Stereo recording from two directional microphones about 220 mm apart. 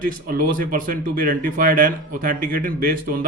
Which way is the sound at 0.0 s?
40° right (ahead or behind).